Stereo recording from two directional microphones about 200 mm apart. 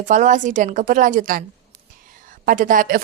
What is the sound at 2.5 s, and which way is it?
Speech, 40° right (ahead or behind).